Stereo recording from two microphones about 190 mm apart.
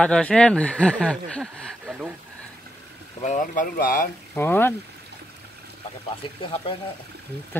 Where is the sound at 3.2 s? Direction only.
40° left (ahead or behind).